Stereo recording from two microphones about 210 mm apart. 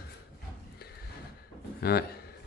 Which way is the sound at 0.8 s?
50° left (ahead or behind).